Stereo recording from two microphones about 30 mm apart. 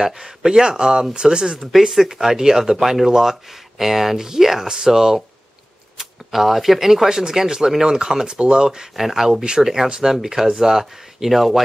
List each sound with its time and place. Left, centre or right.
0.0 s speech: centre
1.9 s speech: centre
5.9 s speech: centre
8.3 s speech: right
8.6 s speech: centre